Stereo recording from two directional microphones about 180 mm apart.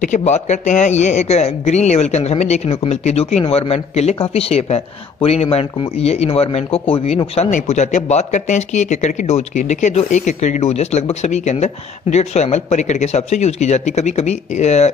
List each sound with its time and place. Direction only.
0.0 s speech: 40° left (ahead or behind)